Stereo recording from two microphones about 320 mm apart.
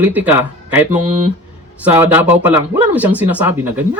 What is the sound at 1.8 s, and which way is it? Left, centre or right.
Speech, centre.